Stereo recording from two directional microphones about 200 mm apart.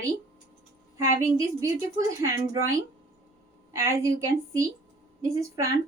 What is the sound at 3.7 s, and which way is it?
A woman's voice, 15° right (ahead or behind).